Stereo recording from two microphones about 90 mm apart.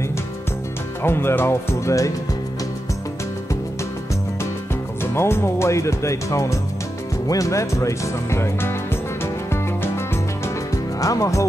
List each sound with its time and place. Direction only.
1.0 s speech: 25° left (ahead or behind)
5.0 s speech: 30° left (ahead or behind)
9.2 s music: 30° left (ahead or behind)
11.0 s speech: 40° left (ahead or behind)